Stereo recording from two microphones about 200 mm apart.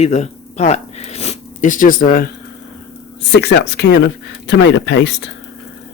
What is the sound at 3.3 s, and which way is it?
Speech, 60° left (ahead or behind).